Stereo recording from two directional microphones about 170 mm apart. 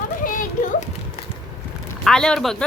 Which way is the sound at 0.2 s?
55° left (ahead or behind).